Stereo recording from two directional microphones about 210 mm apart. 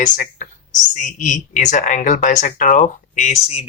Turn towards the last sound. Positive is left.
turn(degrees=30)  # may be behind; listen again after turning